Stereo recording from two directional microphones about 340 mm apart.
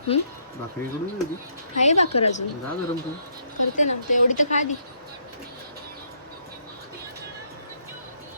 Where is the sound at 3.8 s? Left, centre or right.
Left.